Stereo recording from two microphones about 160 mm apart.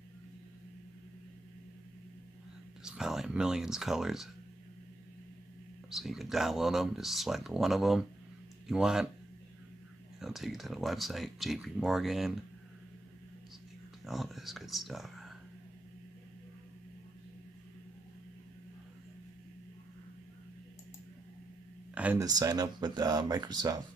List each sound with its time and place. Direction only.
2.8 s speech: 5° right (ahead or behind)
5.9 s speech: centre (ahead or behind)
10.2 s speech: centre (ahead or behind)
14.0 s speech: centre (ahead or behind)
21.9 s a sound: 10° right (ahead or behind)
22.2 s speech: 25° right (ahead or behind)